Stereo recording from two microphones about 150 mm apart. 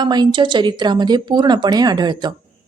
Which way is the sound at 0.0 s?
30° right (ahead or behind).